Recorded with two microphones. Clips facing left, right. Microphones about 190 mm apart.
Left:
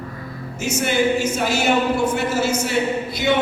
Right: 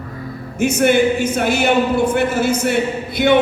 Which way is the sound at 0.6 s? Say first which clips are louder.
Right 6 dB; 60° right (ahead or behind).